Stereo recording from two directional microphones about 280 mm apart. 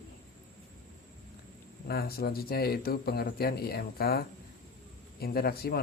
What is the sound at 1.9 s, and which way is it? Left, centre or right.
Speech, left.